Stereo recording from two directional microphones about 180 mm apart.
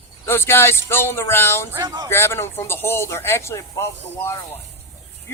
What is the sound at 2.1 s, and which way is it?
A man's voice, 15° left (ahead or behind).